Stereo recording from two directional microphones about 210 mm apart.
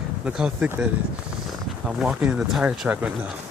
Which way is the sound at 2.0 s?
5° right (ahead or behind).